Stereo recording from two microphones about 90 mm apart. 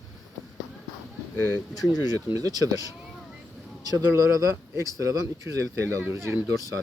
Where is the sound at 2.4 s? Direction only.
40° right (ahead or behind).